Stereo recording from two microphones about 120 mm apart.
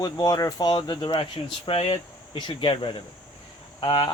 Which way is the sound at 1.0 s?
45° left (ahead or behind).